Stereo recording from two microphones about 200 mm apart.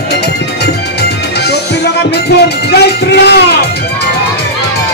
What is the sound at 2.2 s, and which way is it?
Music, 55° left (ahead or behind).